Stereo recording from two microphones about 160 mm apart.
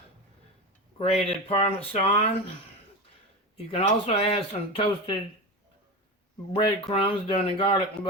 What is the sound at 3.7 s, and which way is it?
Speech, 40° left (ahead or behind).